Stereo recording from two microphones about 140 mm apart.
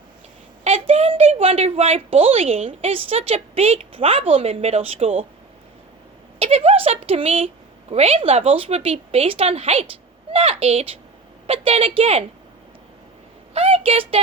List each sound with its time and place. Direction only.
0.6 s a woman's voice: 45° right (ahead or behind)
6.4 s a woman's voice: 40° right (ahead or behind)
13.5 s a sound: 45° right (ahead or behind)